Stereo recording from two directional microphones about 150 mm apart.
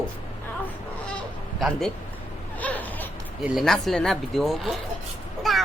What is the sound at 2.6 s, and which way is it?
Laughter, 10° left (ahead or behind).